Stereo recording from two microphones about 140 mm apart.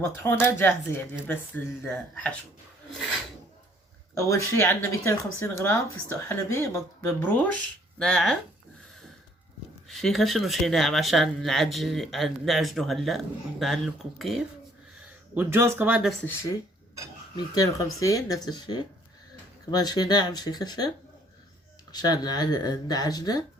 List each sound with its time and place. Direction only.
0.0 s speech: 15° left (ahead or behind)
4.1 s speech: 20° left (ahead or behind)
7.9 s speech: 5° left (ahead or behind)
9.9 s speech: centre (ahead or behind)
15.4 s speech: 20° right (ahead or behind)
16.2 s speech: 15° left (ahead or behind)
17.3 s speech: 25° left (ahead or behind)
21.9 s speech: 30° left (ahead or behind)